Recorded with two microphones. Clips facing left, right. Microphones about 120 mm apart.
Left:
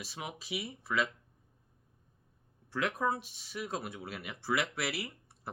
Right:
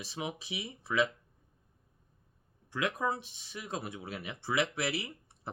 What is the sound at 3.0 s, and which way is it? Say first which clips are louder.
Speech: left 1 dB; 25° right (ahead or behind).